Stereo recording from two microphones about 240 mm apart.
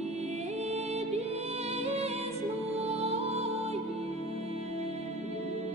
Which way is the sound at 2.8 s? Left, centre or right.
Right.